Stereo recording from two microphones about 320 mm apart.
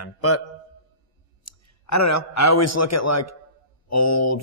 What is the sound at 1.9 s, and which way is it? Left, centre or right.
A man's voice, left.